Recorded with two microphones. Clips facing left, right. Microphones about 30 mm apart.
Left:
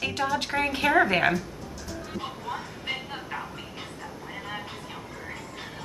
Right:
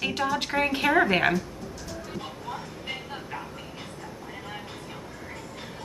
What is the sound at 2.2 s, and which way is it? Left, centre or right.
Vehicle, centre.